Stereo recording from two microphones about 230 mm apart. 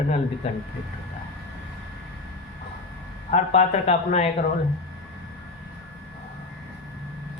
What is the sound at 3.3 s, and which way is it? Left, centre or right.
Speech, left.